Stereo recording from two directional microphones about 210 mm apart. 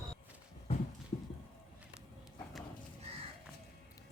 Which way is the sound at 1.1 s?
25° left (ahead or behind).